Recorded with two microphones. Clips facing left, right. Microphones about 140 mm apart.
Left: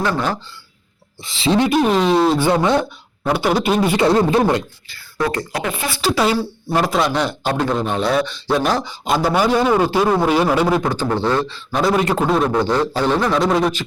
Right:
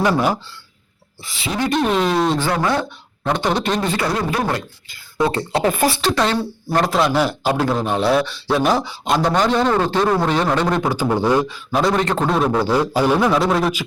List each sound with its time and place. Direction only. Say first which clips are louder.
0.0 s speech: right 3 dB; 10° right (ahead or behind)
1.2 s speech: left 6 dB; 25° left (ahead or behind)
1.7 s a man's voice: left 3 dB; centre (ahead or behind)
2.4 s speech: left 4 dB; 20° left (ahead or behind)
3.2 s speech: left 2 dB; 5° left (ahead or behind); by 4.4 s 30° left (ahead or behind)
4.9 s speech: right 3 dB; 20° right (ahead or behind)
6.0 s a man's voice: left 1 dB; 5° left (ahead or behind)
10.8 s speech: right 1 dB; 10° right (ahead or behind)
11.8 s a man's voice: left 1 dB; 5° left (ahead or behind)